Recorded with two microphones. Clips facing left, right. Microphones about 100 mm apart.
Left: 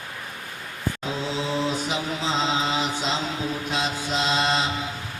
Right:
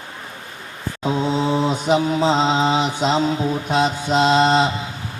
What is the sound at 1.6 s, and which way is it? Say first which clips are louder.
Mantra: right 8 dB; 40° right (ahead or behind).